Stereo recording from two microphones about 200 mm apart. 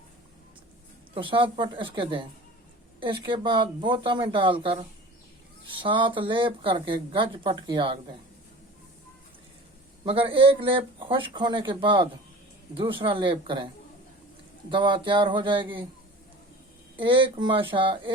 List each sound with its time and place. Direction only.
1.1 s speech: 25° right (ahead or behind)
10.1 s speech: 25° right (ahead or behind)
14.7 s speech: 25° right (ahead or behind)
17.0 s speech: 25° right (ahead or behind)